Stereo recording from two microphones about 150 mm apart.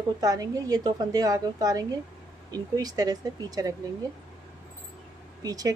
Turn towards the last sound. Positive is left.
turn(degrees=-25)  # may be behind; listen again after turning